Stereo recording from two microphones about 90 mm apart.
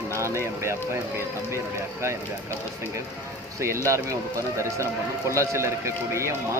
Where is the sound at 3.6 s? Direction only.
35° right (ahead or behind).